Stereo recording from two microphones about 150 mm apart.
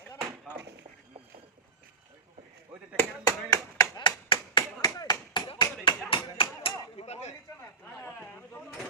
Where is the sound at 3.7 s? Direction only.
30° left (ahead or behind).